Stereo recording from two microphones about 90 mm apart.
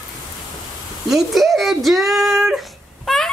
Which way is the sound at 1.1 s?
Centre (ahead or behind).